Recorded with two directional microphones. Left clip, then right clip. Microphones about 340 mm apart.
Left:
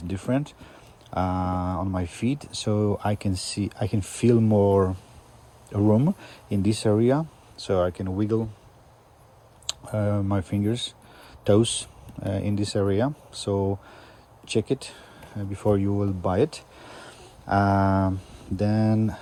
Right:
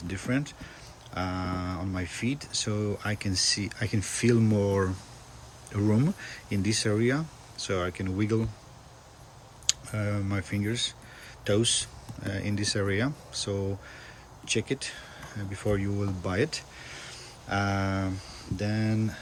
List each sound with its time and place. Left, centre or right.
0.1 s speech: centre
9.6 s a sound: centre
10.2 s speech: centre